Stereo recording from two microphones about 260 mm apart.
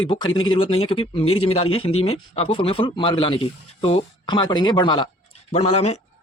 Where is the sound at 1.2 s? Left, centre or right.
Left.